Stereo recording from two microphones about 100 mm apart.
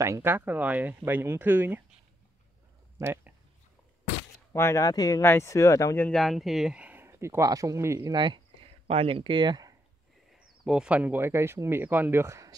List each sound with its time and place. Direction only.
0.0 s speech: 25° right (ahead or behind)
4.5 s speech: 25° left (ahead or behind)
4.8 s speech: 40° left (ahead or behind)
5.2 s speech: 25° left (ahead or behind)
6.1 s speech: centre (ahead or behind); by 7.1 s 15° right (ahead or behind)
7.1 s speech: 30° right (ahead or behind)
8.1 s speech: 50° right (ahead or behind)
8.8 s speech: 70° right (ahead or behind); by 9.8 s 40° right (ahead or behind)
10.6 s speech: 5° right (ahead or behind); by 12.5 s 30° right (ahead or behind)